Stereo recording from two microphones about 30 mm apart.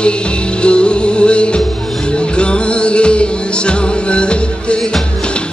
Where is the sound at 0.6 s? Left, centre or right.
Left.